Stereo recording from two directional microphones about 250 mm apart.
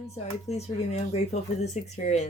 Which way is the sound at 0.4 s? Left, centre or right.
Left.